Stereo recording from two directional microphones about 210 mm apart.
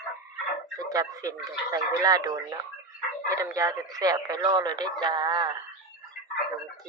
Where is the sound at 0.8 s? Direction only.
15° right (ahead or behind).